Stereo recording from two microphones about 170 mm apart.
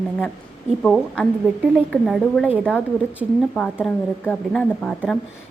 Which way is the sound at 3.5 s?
5° left (ahead or behind).